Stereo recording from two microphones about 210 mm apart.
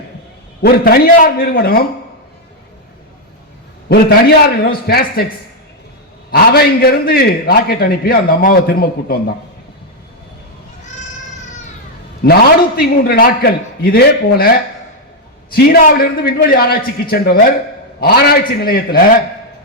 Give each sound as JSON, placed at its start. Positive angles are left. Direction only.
{"t": 0.6, "sound": "a man's voice", "side_deg": 45}
{"t": 4.6, "sound": "a man's voice", "side_deg": 45}
{"t": 6.3, "sound": "a man's voice", "side_deg": 50}
{"t": 12.2, "sound": "a man's voice", "side_deg": 45}